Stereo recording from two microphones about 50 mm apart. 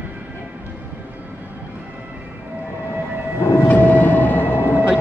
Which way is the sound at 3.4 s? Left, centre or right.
Left.